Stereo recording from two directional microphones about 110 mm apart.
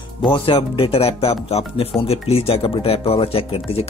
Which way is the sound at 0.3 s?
55° left (ahead or behind).